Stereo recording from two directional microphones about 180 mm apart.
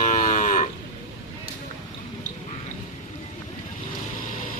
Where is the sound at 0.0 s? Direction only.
40° left (ahead or behind).